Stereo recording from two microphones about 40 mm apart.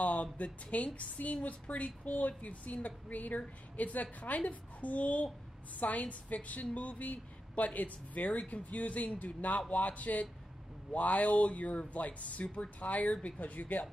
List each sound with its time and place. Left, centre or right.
0.0 s a woman's voice: left